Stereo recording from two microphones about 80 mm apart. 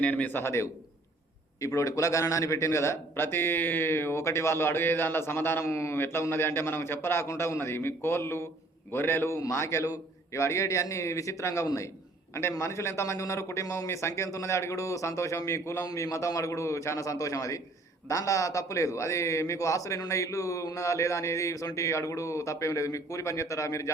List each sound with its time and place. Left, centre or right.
0.0 s a man's voice: centre
0.4 s a man's voice: left